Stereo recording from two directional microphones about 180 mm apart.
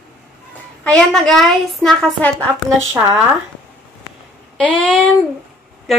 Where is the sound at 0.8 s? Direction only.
5° left (ahead or behind).